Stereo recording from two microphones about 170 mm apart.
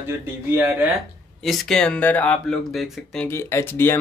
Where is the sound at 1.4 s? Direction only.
Centre (ahead or behind).